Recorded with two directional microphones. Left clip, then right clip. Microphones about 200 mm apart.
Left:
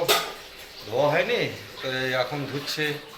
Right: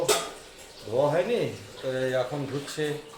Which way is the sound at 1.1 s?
30° right (ahead or behind).